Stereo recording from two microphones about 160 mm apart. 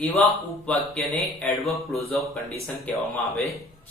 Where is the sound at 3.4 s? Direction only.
20° left (ahead or behind).